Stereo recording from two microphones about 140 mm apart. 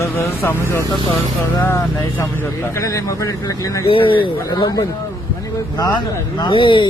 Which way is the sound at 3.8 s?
40° left (ahead or behind).